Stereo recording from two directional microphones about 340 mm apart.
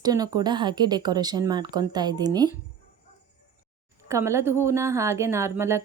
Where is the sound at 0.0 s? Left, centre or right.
Centre.